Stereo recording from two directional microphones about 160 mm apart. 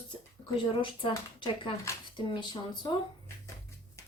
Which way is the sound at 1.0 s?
30° left (ahead or behind).